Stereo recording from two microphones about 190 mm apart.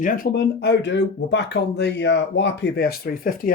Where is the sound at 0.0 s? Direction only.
45° left (ahead or behind).